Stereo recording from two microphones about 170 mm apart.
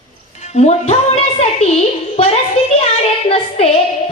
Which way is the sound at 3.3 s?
35° left (ahead or behind).